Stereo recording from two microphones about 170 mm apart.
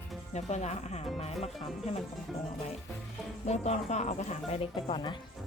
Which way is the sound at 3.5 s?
40° left (ahead or behind).